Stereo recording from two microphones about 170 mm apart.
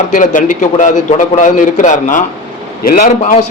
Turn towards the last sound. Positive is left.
turn(degrees=45)  # may be behind; listen again after turning